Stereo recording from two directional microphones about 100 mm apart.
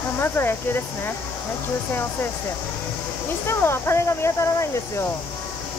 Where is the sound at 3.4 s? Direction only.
25° left (ahead or behind).